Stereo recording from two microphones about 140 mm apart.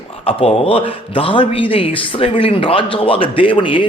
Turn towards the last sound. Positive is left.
turn(degrees=35)  # may be behind; listen again after turning